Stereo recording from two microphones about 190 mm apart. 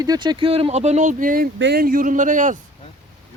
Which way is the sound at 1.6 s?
60° right (ahead or behind).